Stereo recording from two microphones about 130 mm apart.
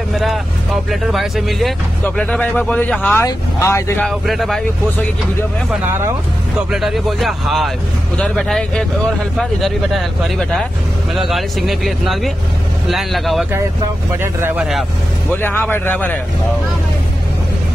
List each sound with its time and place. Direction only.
0.1 s vehicle: centre (ahead or behind)
1.1 s speech: centre (ahead or behind)
2.0 s speech: 10° left (ahead or behind)
3.3 s speech: 20° left (ahead or behind)
4.0 s speech: centre (ahead or behind)
6.7 s speech: centre (ahead or behind)
14.2 s speech: 20° right (ahead or behind)
14.6 s speech: centre (ahead or behind)
15.3 s speech: 15° left (ahead or behind)